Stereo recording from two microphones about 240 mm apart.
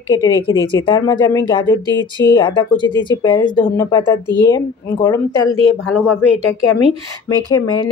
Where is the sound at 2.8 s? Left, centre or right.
Centre.